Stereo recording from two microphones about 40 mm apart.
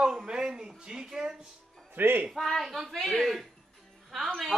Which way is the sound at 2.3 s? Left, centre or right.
Centre.